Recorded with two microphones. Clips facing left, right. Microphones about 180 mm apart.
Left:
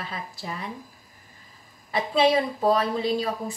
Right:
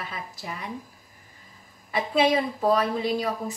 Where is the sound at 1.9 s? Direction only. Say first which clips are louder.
Left 1 dB; 30° left (ahead or behind).